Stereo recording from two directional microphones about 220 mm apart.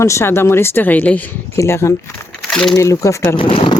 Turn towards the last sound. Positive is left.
turn(degrees=25)  # may be behind; listen again after turning